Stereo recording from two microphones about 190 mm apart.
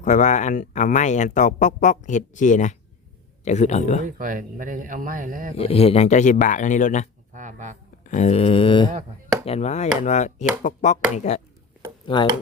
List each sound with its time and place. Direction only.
0.0 s speech: 40° left (ahead or behind)
4.0 s speech: 45° right (ahead or behind)
5.5 s speech: 30° left (ahead or behind)
7.3 s speech: 40° right (ahead or behind)
8.0 s speech: 40° left (ahead or behind)
12.0 s chopping: 25° left (ahead or behind)